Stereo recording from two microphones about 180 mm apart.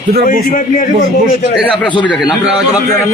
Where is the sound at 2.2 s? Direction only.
5° right (ahead or behind).